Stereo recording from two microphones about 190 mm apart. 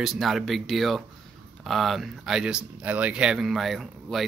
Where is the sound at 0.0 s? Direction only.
Centre (ahead or behind).